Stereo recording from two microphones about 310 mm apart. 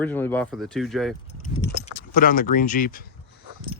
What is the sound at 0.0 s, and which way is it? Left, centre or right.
Speech, centre.